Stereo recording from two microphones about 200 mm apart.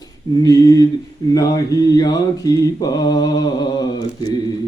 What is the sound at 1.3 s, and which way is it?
Mantra, 15° left (ahead or behind).